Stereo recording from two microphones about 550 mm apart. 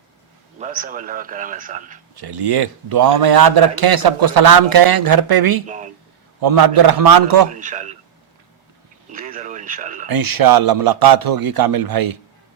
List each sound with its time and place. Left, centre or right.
0.6 s a man's voice: centre
2.1 s a man's voice: right
5.6 s a man's voice: centre
6.4 s a man's voice: right
7.5 s a man's voice: centre
9.1 s radio: centre
10.1 s a man's voice: right